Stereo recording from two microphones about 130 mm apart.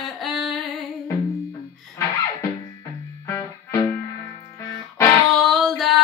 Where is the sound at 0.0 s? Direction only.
Centre (ahead or behind).